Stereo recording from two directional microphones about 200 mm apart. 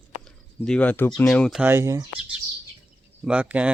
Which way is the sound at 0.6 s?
5° left (ahead or behind).